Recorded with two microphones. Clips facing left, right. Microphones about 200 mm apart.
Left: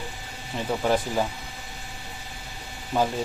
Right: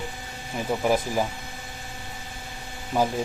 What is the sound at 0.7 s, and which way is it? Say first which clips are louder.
Speech: right 1 dB; 10° right (ahead or behind).